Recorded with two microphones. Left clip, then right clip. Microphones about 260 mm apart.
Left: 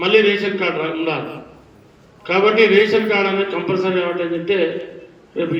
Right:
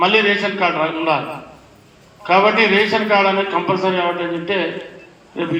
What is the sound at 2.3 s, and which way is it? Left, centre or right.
A man's voice, centre.